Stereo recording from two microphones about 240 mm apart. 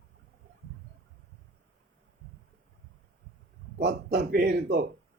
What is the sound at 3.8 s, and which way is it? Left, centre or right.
Speech, right.